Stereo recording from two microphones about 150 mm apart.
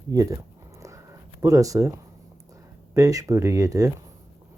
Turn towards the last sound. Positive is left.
turn(degrees=-20)  # may be behind; listen again after turning